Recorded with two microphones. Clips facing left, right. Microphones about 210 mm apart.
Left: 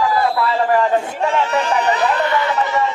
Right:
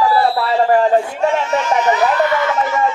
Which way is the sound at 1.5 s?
35° left (ahead or behind).